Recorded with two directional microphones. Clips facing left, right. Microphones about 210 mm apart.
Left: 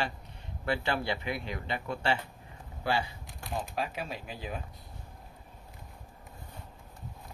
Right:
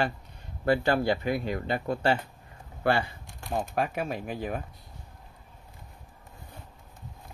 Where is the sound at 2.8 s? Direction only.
55° right (ahead or behind).